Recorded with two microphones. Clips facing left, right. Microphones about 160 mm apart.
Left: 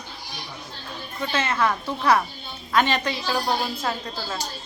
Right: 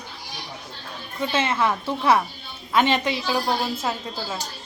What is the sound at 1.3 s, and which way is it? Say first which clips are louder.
A woman's voice: right 1 dB; 25° right (ahead or behind).